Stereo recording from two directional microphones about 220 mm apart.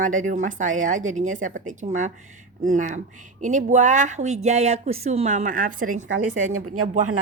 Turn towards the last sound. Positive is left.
turn(degrees=-85)